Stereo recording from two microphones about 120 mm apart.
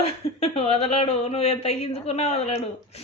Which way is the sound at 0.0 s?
55° left (ahead or behind).